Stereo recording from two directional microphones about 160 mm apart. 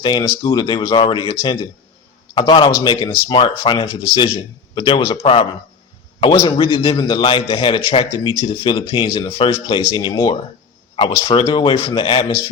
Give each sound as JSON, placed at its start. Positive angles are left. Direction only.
{"t": 0.0, "sound": "speech", "side_deg": 25}